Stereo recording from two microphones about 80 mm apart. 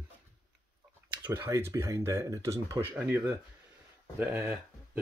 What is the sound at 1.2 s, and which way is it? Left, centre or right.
Speech, right.